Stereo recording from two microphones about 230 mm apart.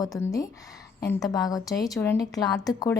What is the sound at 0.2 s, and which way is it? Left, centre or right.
A woman's voice, centre.